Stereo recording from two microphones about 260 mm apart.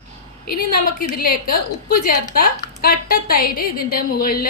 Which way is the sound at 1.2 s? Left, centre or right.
Left.